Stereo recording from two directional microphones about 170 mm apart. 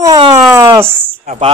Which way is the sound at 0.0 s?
25° right (ahead or behind).